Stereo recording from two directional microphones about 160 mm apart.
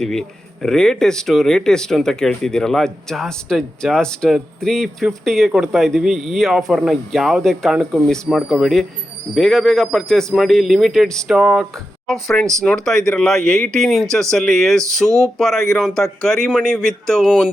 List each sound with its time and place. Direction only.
0.0 s speech: 5° left (ahead or behind)
15.0 s speech: 20° right (ahead or behind)
15.4 s speech: centre (ahead or behind)